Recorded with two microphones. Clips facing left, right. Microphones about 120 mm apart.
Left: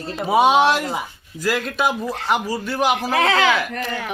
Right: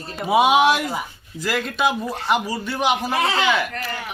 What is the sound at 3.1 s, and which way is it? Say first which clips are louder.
Speech: left 3 dB; 90° left.